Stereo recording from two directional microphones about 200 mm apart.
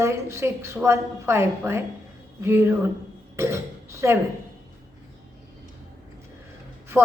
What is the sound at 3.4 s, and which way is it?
Throat clearing, 15° right (ahead or behind).